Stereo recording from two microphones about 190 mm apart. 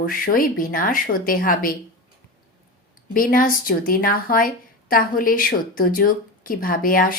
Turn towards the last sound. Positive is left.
turn(degrees=50)  # may be behind; listen again after turning